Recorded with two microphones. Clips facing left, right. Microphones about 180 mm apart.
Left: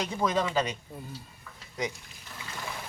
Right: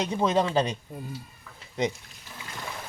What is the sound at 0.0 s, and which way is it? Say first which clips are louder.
Speech: right 4 dB; 25° right (ahead or behind).